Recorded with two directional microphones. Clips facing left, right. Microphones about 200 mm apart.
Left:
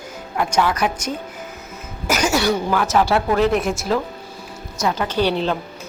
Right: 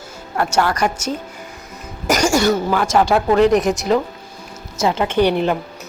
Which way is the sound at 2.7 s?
10° right (ahead or behind).